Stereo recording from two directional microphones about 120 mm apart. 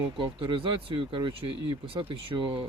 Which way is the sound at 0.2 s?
45° right (ahead or behind).